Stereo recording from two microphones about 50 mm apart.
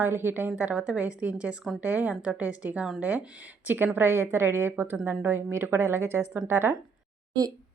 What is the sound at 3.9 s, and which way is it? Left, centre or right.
A woman's voice, right.